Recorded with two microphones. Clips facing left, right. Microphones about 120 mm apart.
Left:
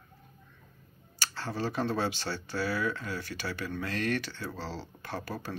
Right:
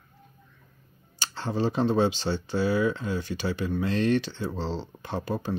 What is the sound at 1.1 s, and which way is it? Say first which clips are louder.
Speech: right 6 dB; 20° right (ahead or behind).